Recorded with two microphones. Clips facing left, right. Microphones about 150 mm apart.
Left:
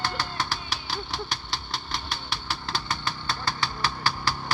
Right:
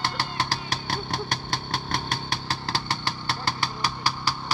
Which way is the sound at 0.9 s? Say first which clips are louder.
Right 3 dB; 55° right (ahead or behind).